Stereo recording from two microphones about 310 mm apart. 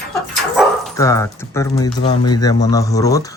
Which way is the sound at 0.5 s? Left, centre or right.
Centre.